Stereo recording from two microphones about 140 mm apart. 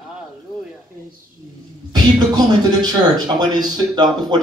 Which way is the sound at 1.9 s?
30° right (ahead or behind).